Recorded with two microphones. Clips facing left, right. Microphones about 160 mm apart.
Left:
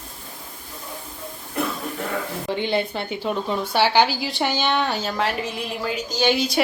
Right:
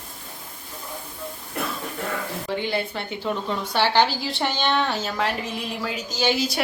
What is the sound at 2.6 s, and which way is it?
A woman's voice, 20° left (ahead or behind).